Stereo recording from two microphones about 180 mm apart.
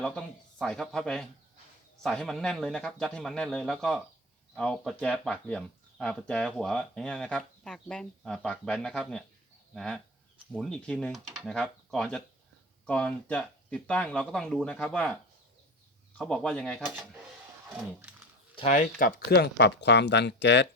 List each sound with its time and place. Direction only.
0.0 s speech: 5° left (ahead or behind)
18.5 s speech: 40° left (ahead or behind); by 20.7 s 75° left (ahead or behind)